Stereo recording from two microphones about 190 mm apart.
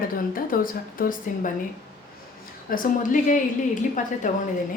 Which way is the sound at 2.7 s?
45° left (ahead or behind).